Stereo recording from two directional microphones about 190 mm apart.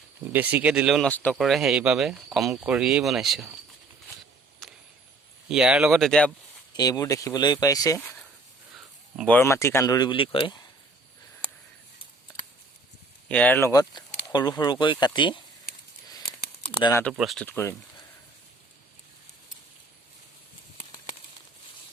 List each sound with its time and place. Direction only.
0.3 s speech: 10° right (ahead or behind)
5.5 s speech: 5° right (ahead or behind)
6.7 s speech: 20° left (ahead or behind)
8.7 s speech: centre (ahead or behind); by 10.6 s 25° left (ahead or behind)
13.2 s speech: 5° left (ahead or behind); by 15.4 s 25° left (ahead or behind)
16.9 s speech: 10° left (ahead or behind)